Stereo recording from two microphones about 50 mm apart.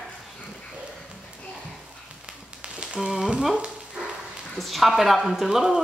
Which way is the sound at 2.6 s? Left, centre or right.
Right.